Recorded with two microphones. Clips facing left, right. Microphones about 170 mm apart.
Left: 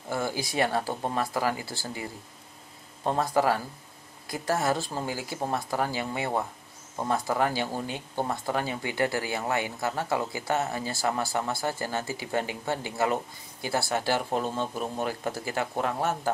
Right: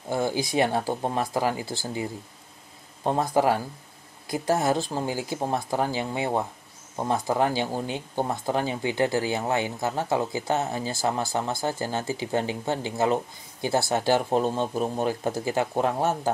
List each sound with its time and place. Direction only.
0.1 s speech: 20° right (ahead or behind)